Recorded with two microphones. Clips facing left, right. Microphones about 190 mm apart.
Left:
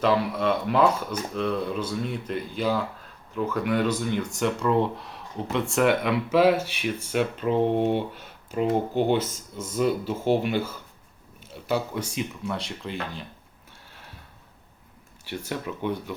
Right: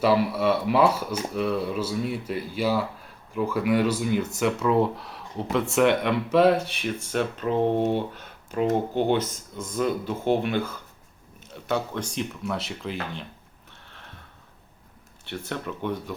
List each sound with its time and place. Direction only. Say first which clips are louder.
0.0 s speech: right 2 dB; 10° right (ahead or behind)
8.2 s a sound: even; centre (ahead or behind)
9.0 s speech: even; 45° left (ahead or behind)
9.6 s speech: left 1 dB; 5° left (ahead or behind)
15.2 s speech: left 1 dB; 10° left (ahead or behind)